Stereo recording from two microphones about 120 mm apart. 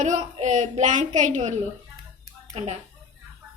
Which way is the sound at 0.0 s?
90° right.